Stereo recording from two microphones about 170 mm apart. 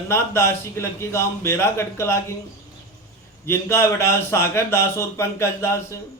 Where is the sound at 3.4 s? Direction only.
15° left (ahead or behind).